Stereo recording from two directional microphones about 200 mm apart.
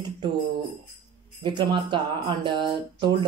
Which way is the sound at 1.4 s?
25° right (ahead or behind).